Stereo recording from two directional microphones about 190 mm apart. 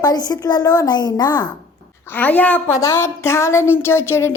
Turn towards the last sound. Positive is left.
turn(degrees=15)  # may be behind; listen again after turning